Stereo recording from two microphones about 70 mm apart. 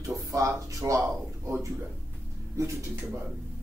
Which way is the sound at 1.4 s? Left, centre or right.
Right.